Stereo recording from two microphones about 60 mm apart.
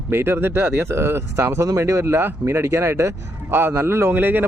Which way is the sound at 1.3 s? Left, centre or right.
Right.